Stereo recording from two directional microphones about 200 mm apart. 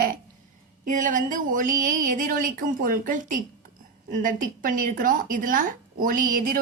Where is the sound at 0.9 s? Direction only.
40° right (ahead or behind).